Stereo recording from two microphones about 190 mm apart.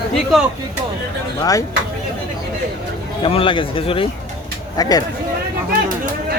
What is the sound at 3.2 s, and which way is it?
Speech, 30° left (ahead or behind).